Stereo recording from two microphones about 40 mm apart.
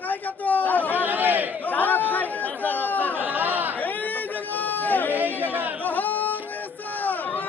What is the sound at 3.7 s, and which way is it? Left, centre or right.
Chatter, left.